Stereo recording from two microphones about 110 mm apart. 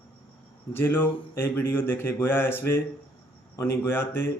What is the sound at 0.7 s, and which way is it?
A man's voice, 20° left (ahead or behind).